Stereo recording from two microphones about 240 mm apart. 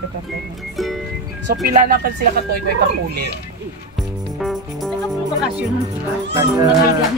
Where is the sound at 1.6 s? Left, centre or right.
Right.